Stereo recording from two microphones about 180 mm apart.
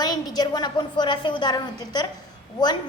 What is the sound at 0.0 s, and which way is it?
A woman's voice, 20° left (ahead or behind).